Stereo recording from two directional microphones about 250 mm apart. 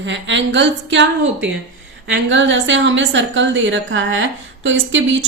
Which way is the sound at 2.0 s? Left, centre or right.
Right.